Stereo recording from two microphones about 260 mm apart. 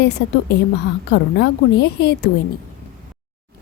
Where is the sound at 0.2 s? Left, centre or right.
Left.